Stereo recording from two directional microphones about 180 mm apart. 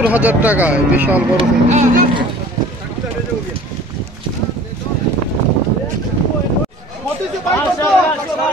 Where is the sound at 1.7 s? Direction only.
40° right (ahead or behind).